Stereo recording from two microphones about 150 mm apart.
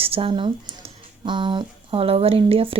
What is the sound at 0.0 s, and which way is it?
Speech, 40° right (ahead or behind).